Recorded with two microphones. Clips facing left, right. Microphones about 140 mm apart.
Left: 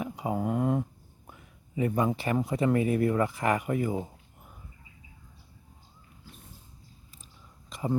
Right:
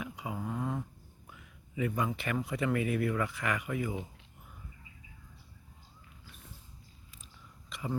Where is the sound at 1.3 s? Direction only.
35° left (ahead or behind).